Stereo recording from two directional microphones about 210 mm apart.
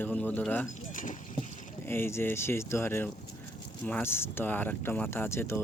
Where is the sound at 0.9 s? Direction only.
40° left (ahead or behind).